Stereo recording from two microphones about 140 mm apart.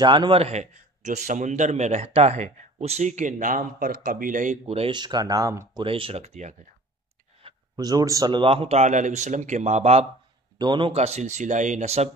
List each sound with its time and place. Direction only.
0.0 s a man's voice: 30° right (ahead or behind); by 4.6 s 70° right (ahead or behind)
4.6 s a man's voice: 45° right (ahead or behind)
4.9 s speech: 30° right (ahead or behind)
5.9 s a man's voice: 40° right (ahead or behind)
7.7 s a man's voice: 25° right (ahead or behind); by 10.0 s 50° right (ahead or behind)
10.6 s a man's voice: 35° right (ahead or behind)
11.0 s a man's voice: 50° right (ahead or behind)